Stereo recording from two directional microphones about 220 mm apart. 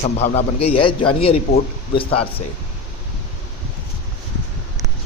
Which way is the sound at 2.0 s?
25° left (ahead or behind).